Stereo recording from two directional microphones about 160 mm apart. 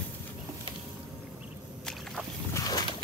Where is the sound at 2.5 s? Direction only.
25° left (ahead or behind).